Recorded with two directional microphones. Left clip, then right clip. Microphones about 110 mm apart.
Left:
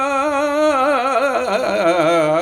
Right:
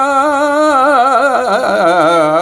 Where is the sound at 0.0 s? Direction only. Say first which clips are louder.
Right 6 dB; 15° right (ahead or behind).